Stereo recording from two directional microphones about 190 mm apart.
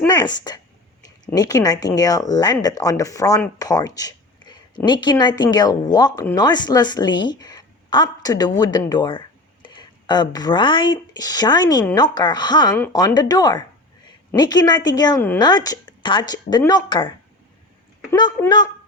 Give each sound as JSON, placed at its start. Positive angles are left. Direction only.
{"t": 0.1, "sound": "a woman's voice", "side_deg": 20}
{"t": 18.1, "sound": "a woman's voice", "side_deg": 20}